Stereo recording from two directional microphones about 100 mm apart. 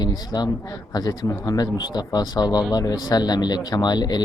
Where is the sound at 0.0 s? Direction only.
45° left (ahead or behind).